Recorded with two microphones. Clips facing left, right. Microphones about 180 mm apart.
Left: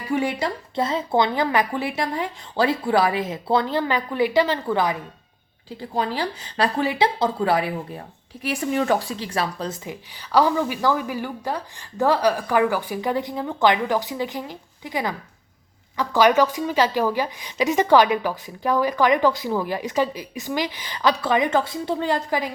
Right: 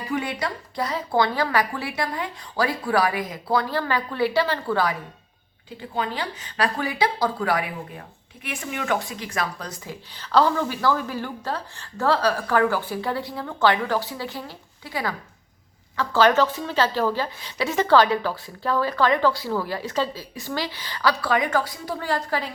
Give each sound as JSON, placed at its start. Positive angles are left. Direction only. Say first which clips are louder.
{"t": 0.1, "sound": "a woman's voice", "louder": "left 4 dB", "side_deg": 25}
{"t": 5.9, "sound": "speech", "louder": "left 3 dB", "side_deg": 35}